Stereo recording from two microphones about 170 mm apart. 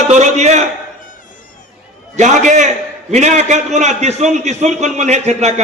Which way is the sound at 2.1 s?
45° right (ahead or behind).